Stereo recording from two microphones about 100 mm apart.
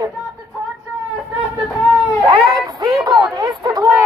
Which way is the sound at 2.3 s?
50° right (ahead or behind).